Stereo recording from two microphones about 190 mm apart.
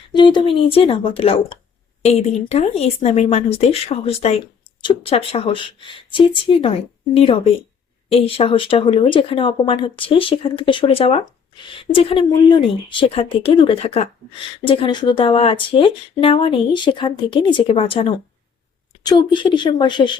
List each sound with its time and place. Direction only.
0.1 s a woman's voice: 25° left (ahead or behind)